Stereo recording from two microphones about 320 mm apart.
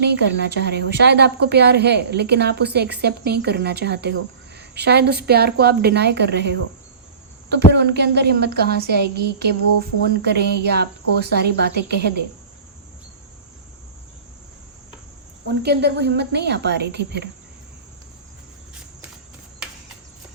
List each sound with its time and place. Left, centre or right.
0.0 s a woman's voice: right
15.6 s a woman's voice: right